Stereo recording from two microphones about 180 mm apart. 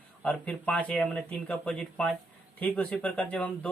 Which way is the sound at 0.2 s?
5° left (ahead or behind).